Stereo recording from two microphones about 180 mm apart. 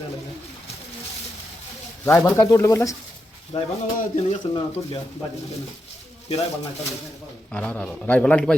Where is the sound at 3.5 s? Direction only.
35° left (ahead or behind).